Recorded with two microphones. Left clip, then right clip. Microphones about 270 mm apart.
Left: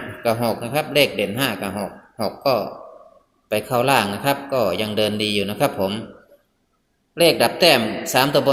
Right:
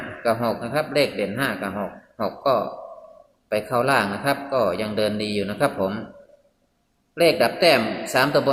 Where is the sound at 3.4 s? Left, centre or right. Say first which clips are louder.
Left 2 dB; centre.